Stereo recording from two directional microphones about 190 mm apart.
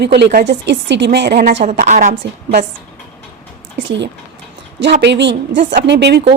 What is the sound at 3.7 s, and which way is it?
Speech, 65° right (ahead or behind).